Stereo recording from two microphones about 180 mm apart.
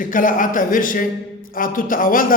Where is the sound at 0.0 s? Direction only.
50° left (ahead or behind).